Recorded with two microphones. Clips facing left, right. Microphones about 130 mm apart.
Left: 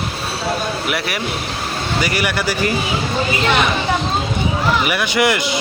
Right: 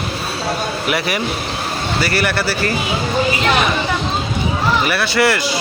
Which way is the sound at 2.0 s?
15° left (ahead or behind).